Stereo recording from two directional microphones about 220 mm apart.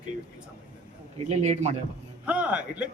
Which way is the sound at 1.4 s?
30° right (ahead or behind).